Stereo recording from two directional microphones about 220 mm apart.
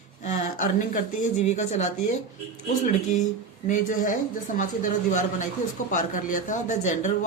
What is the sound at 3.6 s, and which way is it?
Speech, 35° left (ahead or behind).